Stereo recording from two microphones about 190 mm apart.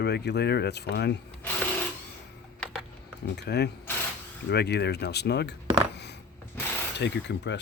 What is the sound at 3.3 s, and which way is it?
Speech, 60° left (ahead or behind).